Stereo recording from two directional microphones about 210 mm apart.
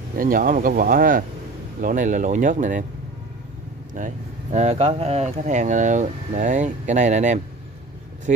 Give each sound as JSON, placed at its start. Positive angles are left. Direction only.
{"t": 0.2, "sound": "speech", "side_deg": -40}
{"t": 3.9, "sound": "speech", "side_deg": -35}